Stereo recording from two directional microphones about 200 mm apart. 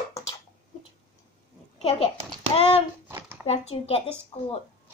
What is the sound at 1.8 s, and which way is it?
Speech, 30° left (ahead or behind).